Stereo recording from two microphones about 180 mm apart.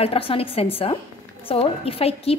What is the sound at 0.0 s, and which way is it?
A woman's voice, 30° left (ahead or behind).